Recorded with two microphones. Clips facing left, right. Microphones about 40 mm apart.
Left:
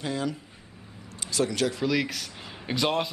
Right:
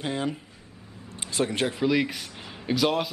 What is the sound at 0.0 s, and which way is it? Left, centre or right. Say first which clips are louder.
Speech: right 1 dB; right.